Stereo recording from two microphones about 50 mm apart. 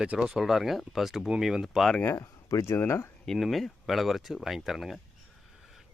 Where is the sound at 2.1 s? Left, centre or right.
Left.